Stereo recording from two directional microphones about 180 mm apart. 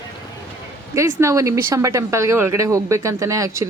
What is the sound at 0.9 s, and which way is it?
Speech, 15° right (ahead or behind).